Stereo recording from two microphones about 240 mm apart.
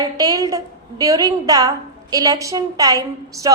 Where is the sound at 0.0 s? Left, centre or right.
Centre.